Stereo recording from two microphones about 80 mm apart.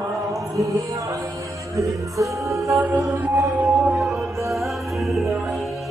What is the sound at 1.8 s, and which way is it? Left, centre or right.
Music, right.